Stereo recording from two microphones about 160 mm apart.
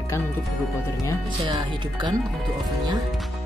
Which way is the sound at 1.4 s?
25° right (ahead or behind).